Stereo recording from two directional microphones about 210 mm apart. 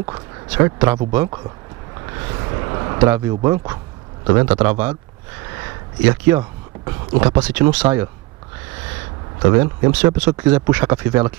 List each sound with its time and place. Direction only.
0.5 s speech: 15° right (ahead or behind)
2.0 s a sound: 15° right (ahead or behind)
3.1 s speech: 10° right (ahead or behind)
5.5 s a sound: 10° right (ahead or behind)
6.8 s speech: 20° right (ahead or behind)
7.4 s speech: 5° right (ahead or behind)
9.4 s speech: 15° right (ahead or behind)